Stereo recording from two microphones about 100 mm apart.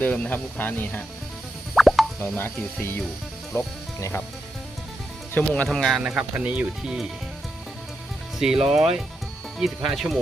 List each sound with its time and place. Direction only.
0.0 s speech: 15° left (ahead or behind)
1.7 s plop: centre (ahead or behind)
5.4 s speech: 15° left (ahead or behind)
5.6 s speech: centre (ahead or behind)
6.0 s speech: 10° right (ahead or behind)
8.4 s speech: 5° right (ahead or behind)